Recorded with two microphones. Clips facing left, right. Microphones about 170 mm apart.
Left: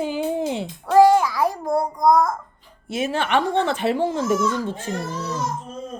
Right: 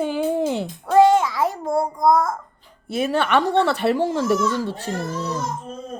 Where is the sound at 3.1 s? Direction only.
50° right (ahead or behind).